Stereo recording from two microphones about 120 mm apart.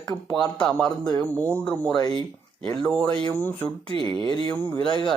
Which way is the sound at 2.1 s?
45° right (ahead or behind).